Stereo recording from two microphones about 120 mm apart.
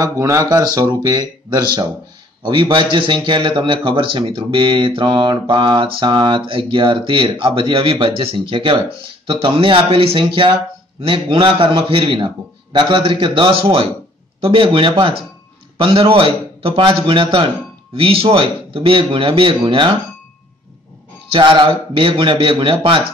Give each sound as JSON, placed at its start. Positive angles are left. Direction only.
{"t": 0.0, "sound": "a man's voice", "side_deg": -30}
{"t": 21.3, "sound": "a man's voice", "side_deg": -45}